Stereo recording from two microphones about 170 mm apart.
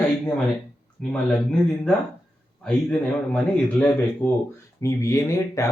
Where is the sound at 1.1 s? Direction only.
5° left (ahead or behind).